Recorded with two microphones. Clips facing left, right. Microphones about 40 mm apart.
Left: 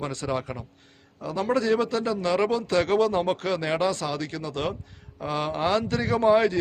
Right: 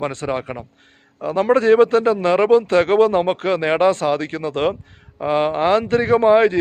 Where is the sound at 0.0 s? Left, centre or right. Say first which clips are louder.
Right 6 dB; right.